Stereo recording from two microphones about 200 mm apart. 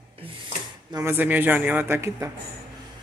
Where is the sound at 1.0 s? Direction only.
10° right (ahead or behind).